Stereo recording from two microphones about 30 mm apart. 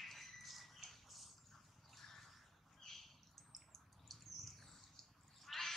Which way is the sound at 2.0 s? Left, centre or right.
Centre.